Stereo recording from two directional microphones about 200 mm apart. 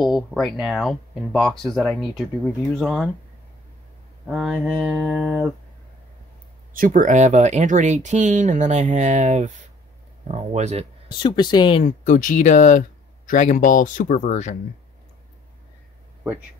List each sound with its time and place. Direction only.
0.0 s speech: centre (ahead or behind)
4.3 s mantra: 5° right (ahead or behind)
6.7 s speech: 40° right (ahead or behind)
11.1 s speech: 20° left (ahead or behind)
11.8 s speech: 40° left (ahead or behind)